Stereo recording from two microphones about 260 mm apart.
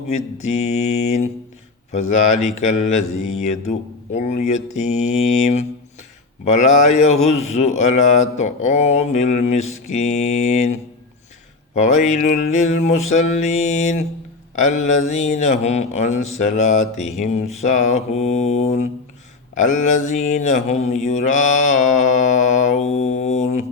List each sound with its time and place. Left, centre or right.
0.4 s speech: left